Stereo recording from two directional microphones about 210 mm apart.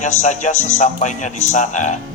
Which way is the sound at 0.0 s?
35° left (ahead or behind).